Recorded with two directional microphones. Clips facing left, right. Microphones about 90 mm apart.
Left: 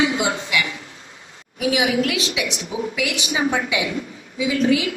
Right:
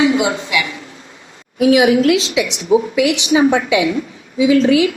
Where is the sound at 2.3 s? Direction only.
40° right (ahead or behind).